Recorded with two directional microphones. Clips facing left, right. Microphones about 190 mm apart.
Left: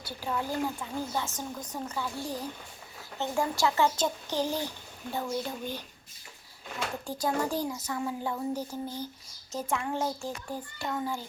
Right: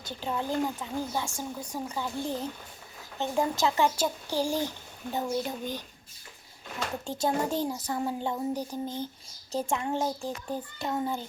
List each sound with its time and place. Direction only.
0.0 s a child's voice: 20° right (ahead or behind)
7.0 s speech: 25° right (ahead or behind)